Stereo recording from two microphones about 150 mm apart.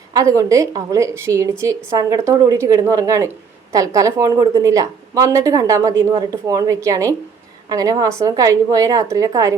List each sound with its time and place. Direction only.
0.1 s speech: 20° right (ahead or behind)